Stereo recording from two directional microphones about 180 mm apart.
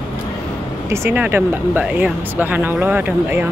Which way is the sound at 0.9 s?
10° right (ahead or behind).